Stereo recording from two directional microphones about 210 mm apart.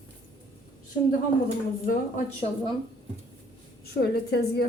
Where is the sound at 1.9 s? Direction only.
35° left (ahead or behind).